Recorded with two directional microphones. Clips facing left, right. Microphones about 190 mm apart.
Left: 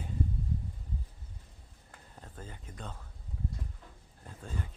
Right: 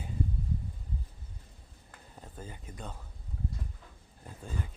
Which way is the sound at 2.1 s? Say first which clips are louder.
Right 2 dB; 5° right (ahead or behind).